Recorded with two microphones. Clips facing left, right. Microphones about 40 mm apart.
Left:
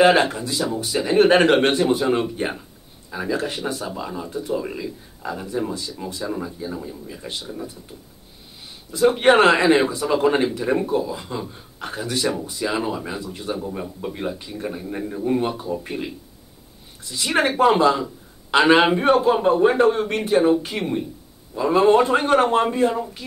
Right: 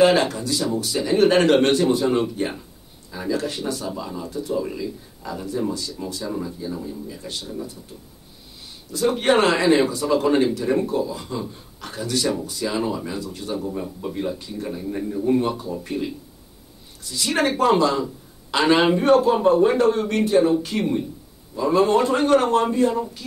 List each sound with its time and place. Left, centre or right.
0.0 s speech: left
8.9 s speech: centre